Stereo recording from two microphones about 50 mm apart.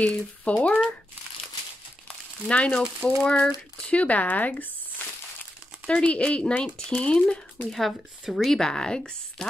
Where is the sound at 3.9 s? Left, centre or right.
Left.